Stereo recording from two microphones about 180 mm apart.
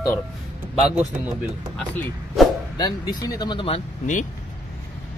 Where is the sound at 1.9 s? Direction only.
10° left (ahead or behind).